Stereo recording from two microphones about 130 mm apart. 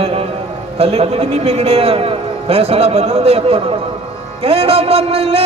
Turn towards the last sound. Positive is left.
turn(degrees=-50)  # may be behind; listen again after turning